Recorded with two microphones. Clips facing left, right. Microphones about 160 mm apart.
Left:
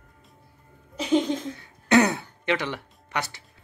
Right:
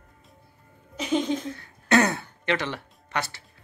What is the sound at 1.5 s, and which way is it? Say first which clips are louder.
Music: left 3 dB; 15° left (ahead or behind).